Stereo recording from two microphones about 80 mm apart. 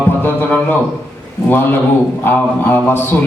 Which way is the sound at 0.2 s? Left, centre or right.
Left.